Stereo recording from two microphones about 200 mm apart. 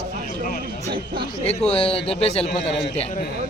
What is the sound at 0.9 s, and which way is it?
Speech, 25° right (ahead or behind).